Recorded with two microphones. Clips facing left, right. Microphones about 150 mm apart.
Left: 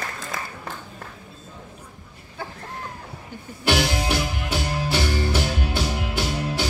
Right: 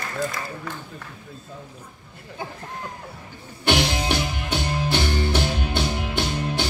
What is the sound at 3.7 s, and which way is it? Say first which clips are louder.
Music: even; 20° right (ahead or behind).